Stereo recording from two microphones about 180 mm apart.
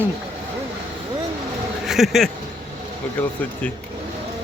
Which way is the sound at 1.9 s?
Centre (ahead or behind).